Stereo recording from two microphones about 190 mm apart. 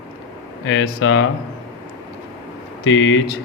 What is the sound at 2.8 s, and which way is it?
Speech, 90° left.